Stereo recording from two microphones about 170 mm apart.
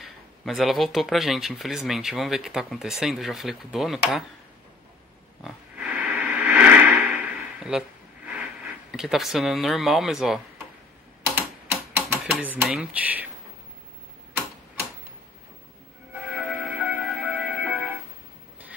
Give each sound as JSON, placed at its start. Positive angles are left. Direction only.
{"t": 0.0, "sound": "speech", "side_deg": 0}
{"t": 5.4, "sound": "a sound", "side_deg": -10}
{"t": 8.3, "sound": "speech", "side_deg": -10}
{"t": 12.1, "sound": "speech", "side_deg": -10}
{"t": 16.2, "sound": "music", "side_deg": -5}